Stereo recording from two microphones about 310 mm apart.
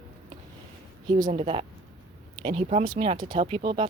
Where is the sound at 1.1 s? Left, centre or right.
Centre.